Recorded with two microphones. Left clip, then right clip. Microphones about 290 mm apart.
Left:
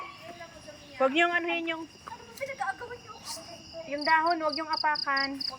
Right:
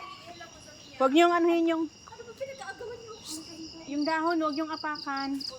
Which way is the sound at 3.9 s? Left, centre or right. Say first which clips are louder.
Left 3 dB; centre.